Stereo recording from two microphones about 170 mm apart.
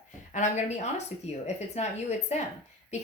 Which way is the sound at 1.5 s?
40° left (ahead or behind).